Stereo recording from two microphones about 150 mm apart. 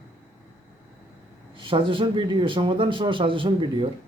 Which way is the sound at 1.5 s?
35° right (ahead or behind).